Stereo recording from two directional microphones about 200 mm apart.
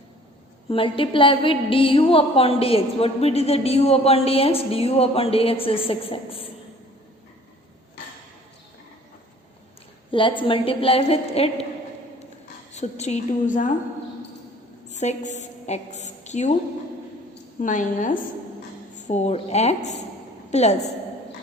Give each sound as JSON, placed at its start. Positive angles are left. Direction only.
{"t": 0.7, "sound": "speech", "side_deg": 25}
{"t": 10.1, "sound": "speech", "side_deg": 25}
{"t": 12.7, "sound": "a woman's voice", "side_deg": 35}
{"t": 14.8, "sound": "a woman's voice", "side_deg": 35}
{"t": 17.6, "sound": "a woman's voice", "side_deg": 40}